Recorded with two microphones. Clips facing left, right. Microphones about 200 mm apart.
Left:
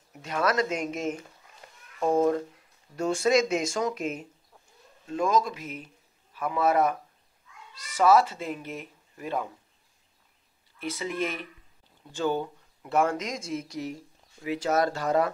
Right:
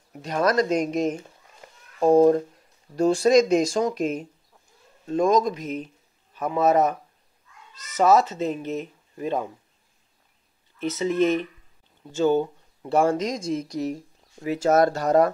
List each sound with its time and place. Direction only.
0.2 s speech: 40° right (ahead or behind)
6.3 s a man's voice: 25° right (ahead or behind)
7.7 s cat: 10° left (ahead or behind)
8.3 s speech: 25° right (ahead or behind)
11.0 s speech: 25° right (ahead or behind); by 15.3 s 45° right (ahead or behind)